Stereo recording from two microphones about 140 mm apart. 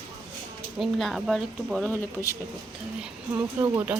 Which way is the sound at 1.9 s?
20° left (ahead or behind).